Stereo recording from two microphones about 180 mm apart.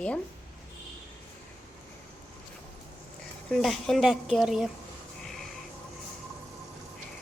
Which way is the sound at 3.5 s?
Centre (ahead or behind).